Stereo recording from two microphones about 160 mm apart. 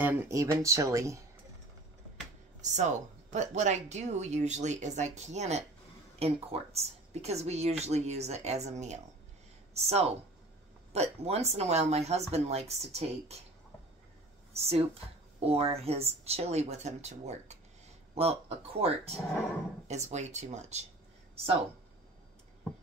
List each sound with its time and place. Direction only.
0.0 s speech: 15° right (ahead or behind)
2.6 s speech: 45° right (ahead or behind)
14.5 s speech: 40° right (ahead or behind)